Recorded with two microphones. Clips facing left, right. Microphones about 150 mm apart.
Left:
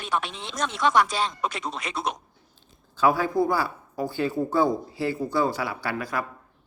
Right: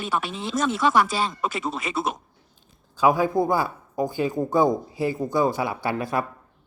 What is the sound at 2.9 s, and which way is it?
Speech, 15° right (ahead or behind).